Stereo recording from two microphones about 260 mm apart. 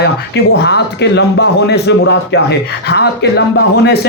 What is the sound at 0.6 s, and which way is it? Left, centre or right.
A man's voice, left.